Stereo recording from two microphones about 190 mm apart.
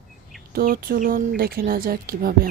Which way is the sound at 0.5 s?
50° right (ahead or behind).